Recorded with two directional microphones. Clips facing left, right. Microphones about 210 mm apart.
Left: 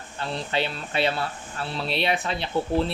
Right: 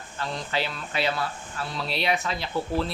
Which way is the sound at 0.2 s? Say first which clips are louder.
Left 2 dB; 25° left (ahead or behind).